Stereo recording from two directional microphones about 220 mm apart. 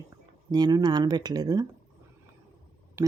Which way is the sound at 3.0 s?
10° right (ahead or behind).